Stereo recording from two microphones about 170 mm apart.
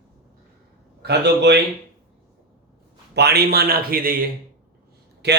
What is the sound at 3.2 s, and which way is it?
A man's voice, 70° right (ahead or behind).